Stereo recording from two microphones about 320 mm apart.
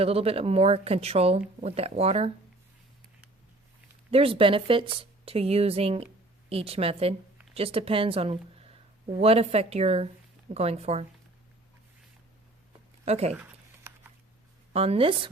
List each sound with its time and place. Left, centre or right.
0.0 s speech: centre
4.1 s speech: centre
13.1 s speech: centre
14.7 s speech: centre